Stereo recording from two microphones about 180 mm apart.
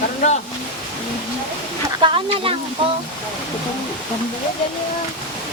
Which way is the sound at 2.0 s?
30° right (ahead or behind).